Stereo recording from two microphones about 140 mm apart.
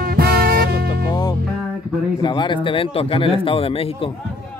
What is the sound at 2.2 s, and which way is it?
Speech, 35° left (ahead or behind).